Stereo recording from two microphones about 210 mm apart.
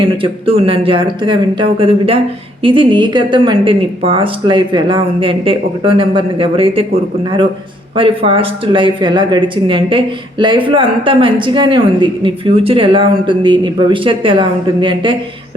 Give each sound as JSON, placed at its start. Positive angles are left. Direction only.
{"t": 0.0, "sound": "speech", "side_deg": -25}
{"t": 7.9, "sound": "speech", "side_deg": -25}